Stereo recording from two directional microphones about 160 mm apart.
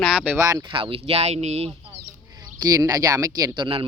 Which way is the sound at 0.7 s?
35° right (ahead or behind).